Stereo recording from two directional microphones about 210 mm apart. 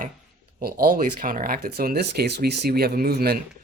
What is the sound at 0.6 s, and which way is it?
Speech, 45° right (ahead or behind).